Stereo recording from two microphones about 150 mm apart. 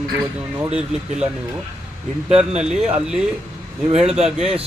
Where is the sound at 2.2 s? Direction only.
45° right (ahead or behind).